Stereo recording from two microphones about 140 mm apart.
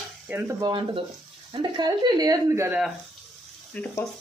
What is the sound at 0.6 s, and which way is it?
Speech, 30° right (ahead or behind).